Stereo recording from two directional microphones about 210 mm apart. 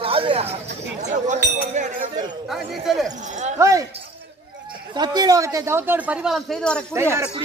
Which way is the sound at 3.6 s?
15° right (ahead or behind).